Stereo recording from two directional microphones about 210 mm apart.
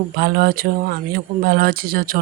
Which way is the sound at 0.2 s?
50° right (ahead or behind).